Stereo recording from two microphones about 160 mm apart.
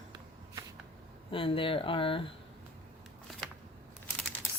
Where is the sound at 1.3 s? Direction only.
35° left (ahead or behind).